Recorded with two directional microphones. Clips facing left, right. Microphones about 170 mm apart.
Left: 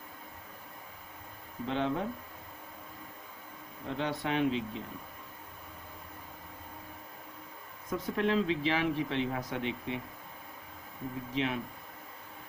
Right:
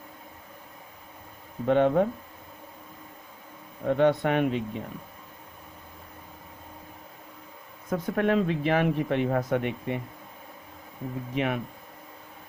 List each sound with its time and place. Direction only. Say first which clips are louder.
1.6 s speech: right 11 dB; 55° right (ahead or behind)
3.8 s speech: right 11 dB; 55° right (ahead or behind)
7.9 s speech: right 5 dB; 55° right (ahead or behind)
11.3 s speech: right 5 dB; 60° right (ahead or behind)